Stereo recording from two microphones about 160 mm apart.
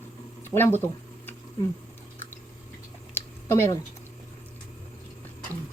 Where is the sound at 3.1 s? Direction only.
15° left (ahead or behind).